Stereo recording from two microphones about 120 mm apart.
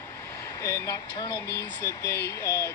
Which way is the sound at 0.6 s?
25° left (ahead or behind).